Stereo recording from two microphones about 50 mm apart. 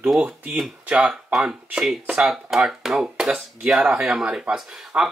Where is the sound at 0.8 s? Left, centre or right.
Centre.